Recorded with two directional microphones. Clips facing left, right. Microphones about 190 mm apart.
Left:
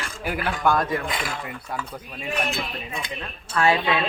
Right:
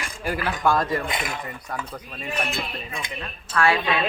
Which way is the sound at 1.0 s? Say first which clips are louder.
Even; 20° right (ahead or behind).